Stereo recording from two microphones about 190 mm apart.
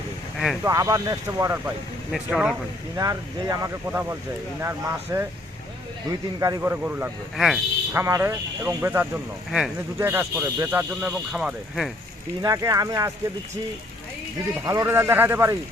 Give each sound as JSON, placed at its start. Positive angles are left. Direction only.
{"t": 0.6, "sound": "speech", "side_deg": -20}
{"t": 2.1, "sound": "speech", "side_deg": -5}
{"t": 3.0, "sound": "speech", "side_deg": -20}
{"t": 7.3, "sound": "speech", "side_deg": 0}
{"t": 7.9, "sound": "speech", "side_deg": -15}
{"t": 12.4, "sound": "speech", "side_deg": -20}
{"t": 14.6, "sound": "speech", "side_deg": -15}